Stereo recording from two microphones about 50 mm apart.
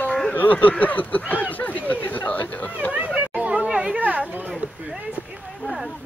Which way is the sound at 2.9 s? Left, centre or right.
Right.